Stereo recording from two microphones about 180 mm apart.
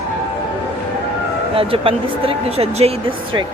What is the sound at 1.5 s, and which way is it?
Speech, 30° right (ahead or behind).